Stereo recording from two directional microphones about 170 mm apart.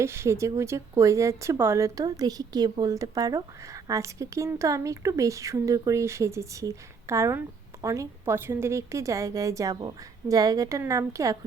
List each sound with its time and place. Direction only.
0.0 s speech: 15° right (ahead or behind)